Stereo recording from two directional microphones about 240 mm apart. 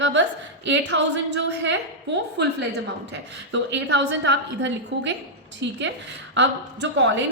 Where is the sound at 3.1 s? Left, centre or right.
Right.